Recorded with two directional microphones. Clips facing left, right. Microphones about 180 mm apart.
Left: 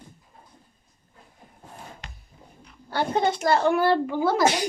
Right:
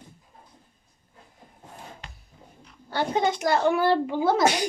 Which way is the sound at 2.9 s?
15° right (ahead or behind).